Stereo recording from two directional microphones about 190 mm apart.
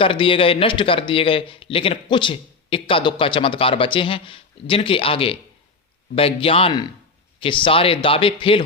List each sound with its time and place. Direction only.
0.0 s speech: 25° left (ahead or behind)